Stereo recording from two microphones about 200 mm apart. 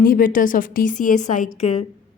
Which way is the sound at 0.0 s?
45° left (ahead or behind).